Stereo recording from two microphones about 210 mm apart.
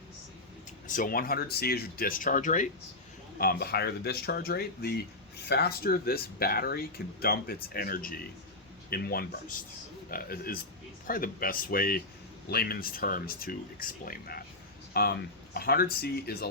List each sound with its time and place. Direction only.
0.9 s speech: 40° left (ahead or behind)